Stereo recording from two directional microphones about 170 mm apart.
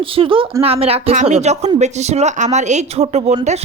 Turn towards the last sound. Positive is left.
turn(degrees=-40)  # may be behind; listen again after turning